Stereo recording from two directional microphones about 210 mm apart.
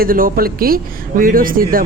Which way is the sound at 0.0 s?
45° right (ahead or behind).